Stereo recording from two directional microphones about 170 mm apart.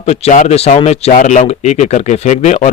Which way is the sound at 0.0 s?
40° left (ahead or behind).